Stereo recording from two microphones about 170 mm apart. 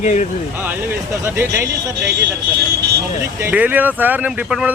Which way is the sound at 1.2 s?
15° right (ahead or behind).